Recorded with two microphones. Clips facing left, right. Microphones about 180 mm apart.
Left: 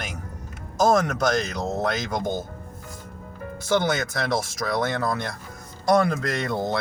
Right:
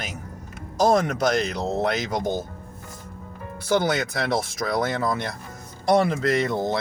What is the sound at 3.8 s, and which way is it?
Speech, 30° right (ahead or behind).